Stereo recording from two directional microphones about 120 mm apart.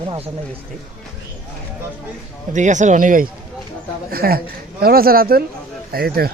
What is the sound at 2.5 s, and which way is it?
Speech, 90° right.